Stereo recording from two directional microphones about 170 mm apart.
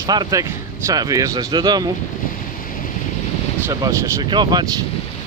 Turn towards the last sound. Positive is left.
turn(degrees=-25)  # may be behind; listen again after turning